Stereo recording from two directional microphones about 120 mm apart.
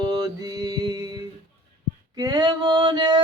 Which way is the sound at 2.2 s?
35° right (ahead or behind).